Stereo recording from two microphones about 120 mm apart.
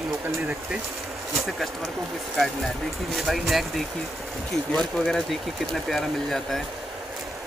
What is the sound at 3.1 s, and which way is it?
Speech, centre (ahead or behind).